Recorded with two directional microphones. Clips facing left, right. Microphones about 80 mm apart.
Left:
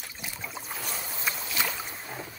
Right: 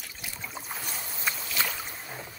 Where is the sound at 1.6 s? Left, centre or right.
Centre.